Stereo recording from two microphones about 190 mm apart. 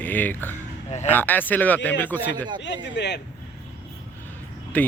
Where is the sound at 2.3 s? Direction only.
25° right (ahead or behind).